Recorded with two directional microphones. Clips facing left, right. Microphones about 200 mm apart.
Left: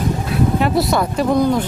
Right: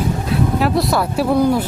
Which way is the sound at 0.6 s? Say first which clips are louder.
Even; centre (ahead or behind).